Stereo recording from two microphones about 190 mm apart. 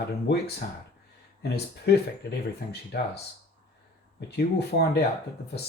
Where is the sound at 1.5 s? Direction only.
60° left (ahead or behind).